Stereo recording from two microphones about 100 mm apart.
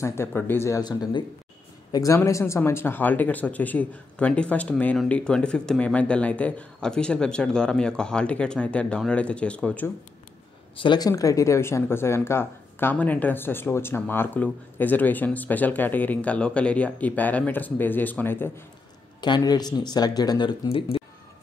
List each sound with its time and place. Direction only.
0.0 s speech: 25° left (ahead or behind)
0.7 s a man's voice: 45° left (ahead or behind); by 9.8 s 10° left (ahead or behind)
10.8 s speech: 50° left (ahead or behind)
11.1 s speech: 35° left (ahead or behind)
19.2 s speech: 45° left (ahead or behind)
20.6 s speech: 70° left (ahead or behind)